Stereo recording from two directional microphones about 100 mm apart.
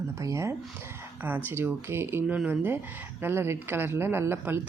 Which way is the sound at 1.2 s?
20° right (ahead or behind).